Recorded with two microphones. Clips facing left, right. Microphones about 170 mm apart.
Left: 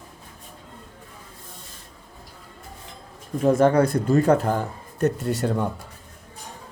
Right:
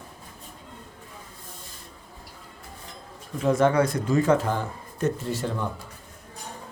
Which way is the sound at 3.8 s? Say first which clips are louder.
Left 4 dB; 60° left (ahead or behind).